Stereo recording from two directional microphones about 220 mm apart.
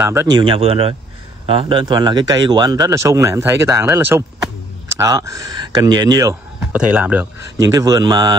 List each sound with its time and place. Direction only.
0.0 s a man's voice: 10° right (ahead or behind)
0.4 s a man's voice: 25° right (ahead or behind)